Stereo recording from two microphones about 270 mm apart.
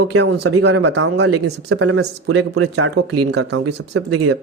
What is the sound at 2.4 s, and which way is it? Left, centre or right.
Speech, right.